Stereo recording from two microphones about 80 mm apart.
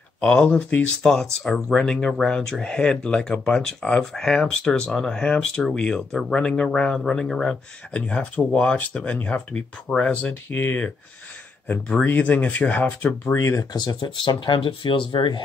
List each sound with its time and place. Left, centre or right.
0.2 s speech: centre
0.9 s speech: centre
7.9 s speech: centre
10.5 s speech: left
12.0 s speech: left
13.4 s speech: left
14.0 s speech: left